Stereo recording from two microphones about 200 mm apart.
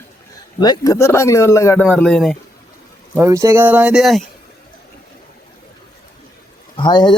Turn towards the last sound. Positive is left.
turn(degrees=20)  # may be behind; listen again after turning